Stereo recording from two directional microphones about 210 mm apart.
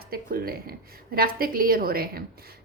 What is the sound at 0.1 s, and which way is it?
A woman's voice, 45° right (ahead or behind).